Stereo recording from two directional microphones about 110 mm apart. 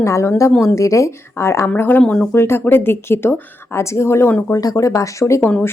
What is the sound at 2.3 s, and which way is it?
A woman's voice, 20° left (ahead or behind).